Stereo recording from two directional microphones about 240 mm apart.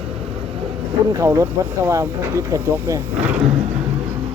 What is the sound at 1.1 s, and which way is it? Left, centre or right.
Speech, centre.